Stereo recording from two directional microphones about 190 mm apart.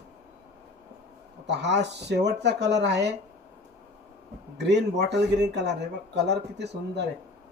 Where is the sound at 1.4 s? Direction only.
65° right (ahead or behind).